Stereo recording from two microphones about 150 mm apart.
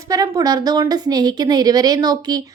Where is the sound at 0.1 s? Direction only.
25° right (ahead or behind).